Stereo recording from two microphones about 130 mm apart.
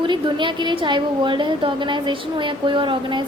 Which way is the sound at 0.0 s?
40° right (ahead or behind).